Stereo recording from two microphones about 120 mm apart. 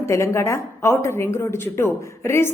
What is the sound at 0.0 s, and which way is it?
Speech, 25° left (ahead or behind).